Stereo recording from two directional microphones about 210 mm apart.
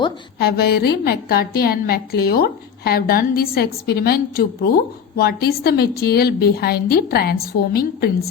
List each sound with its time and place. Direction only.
0.3 s a woman's voice: 50° left (ahead or behind)